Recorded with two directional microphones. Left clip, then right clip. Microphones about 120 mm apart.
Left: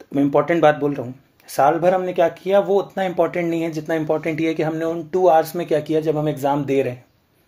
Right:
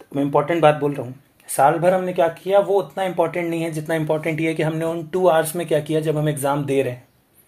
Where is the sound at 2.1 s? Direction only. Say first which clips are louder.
Left 1 dB; 35° left (ahead or behind).